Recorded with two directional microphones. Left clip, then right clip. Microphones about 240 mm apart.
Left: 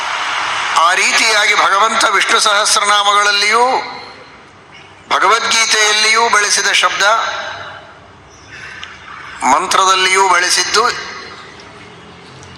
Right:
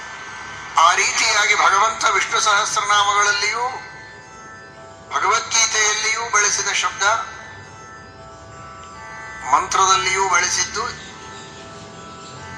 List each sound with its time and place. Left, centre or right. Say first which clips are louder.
0.0 s a man's voice: left 15 dB; left
5.0 s a man's voice: left 8 dB; left
9.4 s a man's voice: left 5 dB; left